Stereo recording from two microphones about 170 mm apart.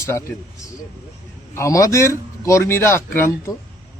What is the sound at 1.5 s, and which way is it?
A man's voice, 20° left (ahead or behind).